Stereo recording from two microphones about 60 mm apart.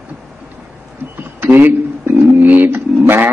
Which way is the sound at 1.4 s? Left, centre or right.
Right.